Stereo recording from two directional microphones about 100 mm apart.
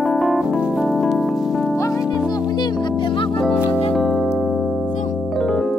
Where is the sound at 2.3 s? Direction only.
40° left (ahead or behind).